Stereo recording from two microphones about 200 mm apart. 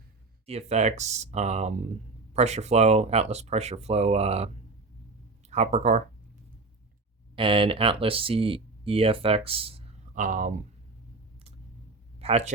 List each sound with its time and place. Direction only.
0.4 s speech: 30° right (ahead or behind)
7.3 s speech: 25° right (ahead or behind)
10.2 s speech: 40° right (ahead or behind)
12.2 s speech: 30° right (ahead or behind)